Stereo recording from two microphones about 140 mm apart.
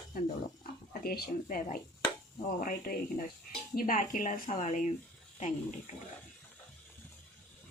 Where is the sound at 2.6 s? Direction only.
80° left; by 4.9 s 60° left (ahead or behind).